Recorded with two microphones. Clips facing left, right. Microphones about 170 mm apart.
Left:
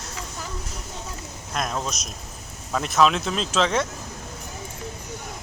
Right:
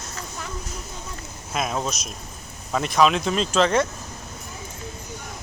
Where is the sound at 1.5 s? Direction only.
5° right (ahead or behind).